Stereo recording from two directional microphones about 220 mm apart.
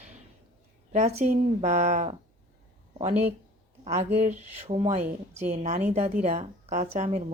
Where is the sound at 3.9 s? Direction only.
30° right (ahead or behind).